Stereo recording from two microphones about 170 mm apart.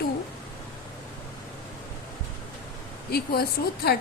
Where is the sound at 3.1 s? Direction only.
65° left (ahead or behind).